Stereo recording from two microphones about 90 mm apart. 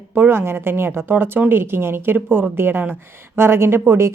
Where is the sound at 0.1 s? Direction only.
20° right (ahead or behind).